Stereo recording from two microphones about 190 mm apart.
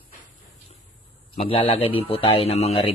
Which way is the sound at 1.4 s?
30° left (ahead or behind).